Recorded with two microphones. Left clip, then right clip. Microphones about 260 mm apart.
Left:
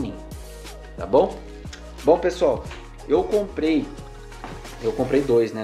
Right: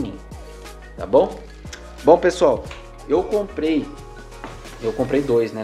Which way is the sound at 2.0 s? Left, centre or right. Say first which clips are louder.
Right 4 dB; centre.